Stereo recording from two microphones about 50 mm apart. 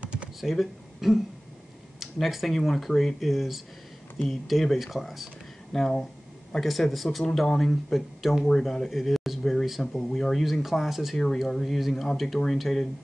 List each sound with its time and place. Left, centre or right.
0.0 s computer keyboard: right
0.4 s speech: centre
8.5 s speech: centre